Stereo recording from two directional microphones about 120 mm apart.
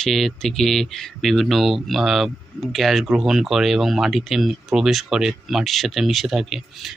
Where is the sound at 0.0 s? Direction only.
5° left (ahead or behind).